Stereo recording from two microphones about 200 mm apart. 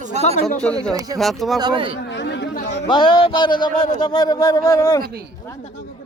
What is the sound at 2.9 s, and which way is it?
A man's voice, 25° left (ahead or behind).